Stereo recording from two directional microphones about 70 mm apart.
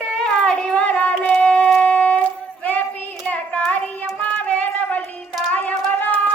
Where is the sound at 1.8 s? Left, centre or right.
Left.